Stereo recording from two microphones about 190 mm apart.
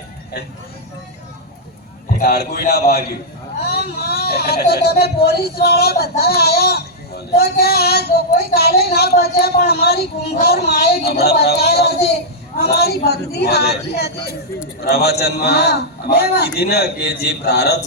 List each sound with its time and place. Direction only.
2.1 s a man's voice: 55° left (ahead or behind)